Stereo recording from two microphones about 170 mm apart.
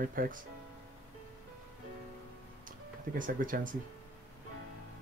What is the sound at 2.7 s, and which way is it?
Speech, 50° right (ahead or behind).